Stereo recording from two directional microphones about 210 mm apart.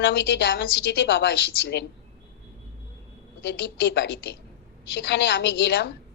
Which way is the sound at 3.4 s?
55° left (ahead or behind).